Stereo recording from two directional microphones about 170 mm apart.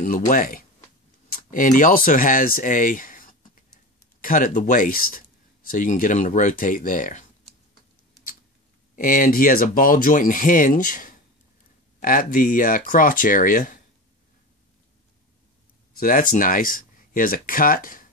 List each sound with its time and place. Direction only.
0.0 s speech: 50° left (ahead or behind)
8.1 s tick-tock: 55° left (ahead or behind)
8.9 s speech: 55° left (ahead or behind)
16.0 s speech: 55° left (ahead or behind)